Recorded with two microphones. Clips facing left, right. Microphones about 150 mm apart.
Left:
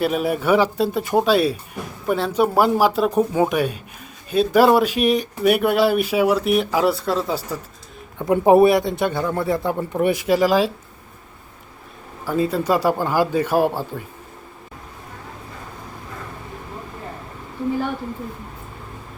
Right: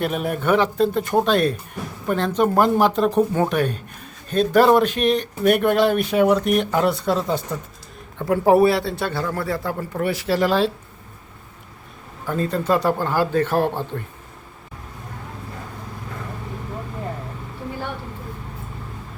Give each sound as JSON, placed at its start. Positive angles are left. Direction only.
{"t": 0.0, "sound": "speech", "side_deg": 5}
{"t": 8.2, "sound": "speech", "side_deg": 20}
{"t": 12.2, "sound": "speech", "side_deg": 10}